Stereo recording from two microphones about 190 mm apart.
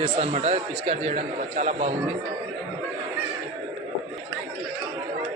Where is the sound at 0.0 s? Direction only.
30° right (ahead or behind).